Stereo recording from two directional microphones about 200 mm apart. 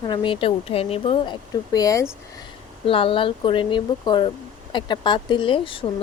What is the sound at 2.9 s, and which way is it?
Speech, 25° left (ahead or behind).